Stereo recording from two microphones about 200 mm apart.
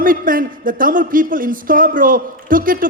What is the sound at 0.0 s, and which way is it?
Speech, 45° right (ahead or behind).